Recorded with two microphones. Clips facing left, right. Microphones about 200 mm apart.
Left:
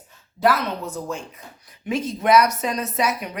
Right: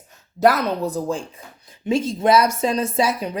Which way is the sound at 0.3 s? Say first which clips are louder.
Right 4 dB; 40° right (ahead or behind).